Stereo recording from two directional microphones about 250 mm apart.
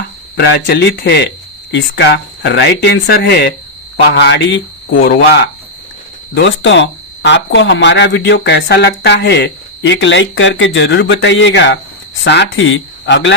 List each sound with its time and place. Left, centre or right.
0.3 s speech: left
6.3 s speech: left